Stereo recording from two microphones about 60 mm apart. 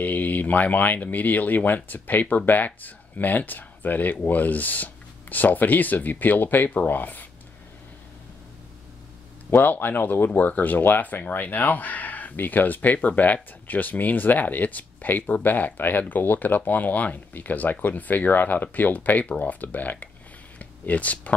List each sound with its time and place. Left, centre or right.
0.0 s speech: left
9.5 s speech: left
20.5 s a sound: left